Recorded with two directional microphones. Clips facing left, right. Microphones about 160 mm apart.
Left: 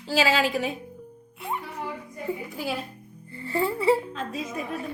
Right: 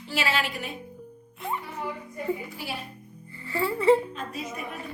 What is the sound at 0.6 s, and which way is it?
Speech, 90° left.